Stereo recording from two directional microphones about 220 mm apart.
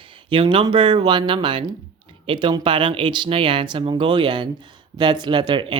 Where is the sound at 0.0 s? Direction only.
25° right (ahead or behind).